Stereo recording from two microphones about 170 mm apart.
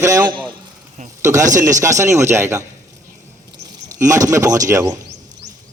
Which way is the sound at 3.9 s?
20° right (ahead or behind).